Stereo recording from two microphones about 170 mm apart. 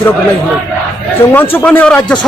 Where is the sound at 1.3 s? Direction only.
10° left (ahead or behind).